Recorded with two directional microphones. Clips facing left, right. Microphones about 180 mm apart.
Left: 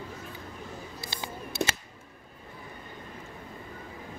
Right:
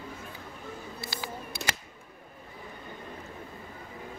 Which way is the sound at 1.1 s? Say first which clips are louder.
Left 2 dB; 25° left (ahead or behind).